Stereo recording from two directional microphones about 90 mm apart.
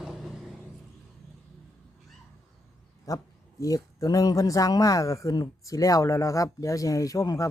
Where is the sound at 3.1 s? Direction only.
40° left (ahead or behind).